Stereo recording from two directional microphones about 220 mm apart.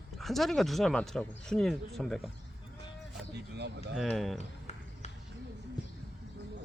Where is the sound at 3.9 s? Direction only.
Centre (ahead or behind).